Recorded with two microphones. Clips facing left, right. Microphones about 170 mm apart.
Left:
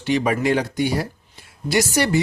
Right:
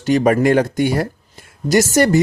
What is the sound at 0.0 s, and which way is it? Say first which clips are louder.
Speech: right 6 dB; 45° right (ahead or behind).